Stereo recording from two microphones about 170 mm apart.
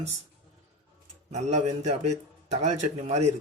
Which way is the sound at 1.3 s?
45° right (ahead or behind).